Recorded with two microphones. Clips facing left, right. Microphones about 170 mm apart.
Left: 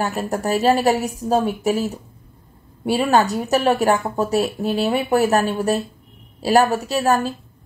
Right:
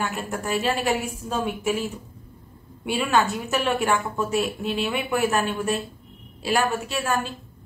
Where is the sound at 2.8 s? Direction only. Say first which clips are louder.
Left 5 dB; 35° left (ahead or behind).